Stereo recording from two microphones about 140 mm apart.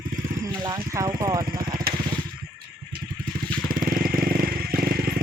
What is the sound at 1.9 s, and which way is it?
Crushing, 90° right.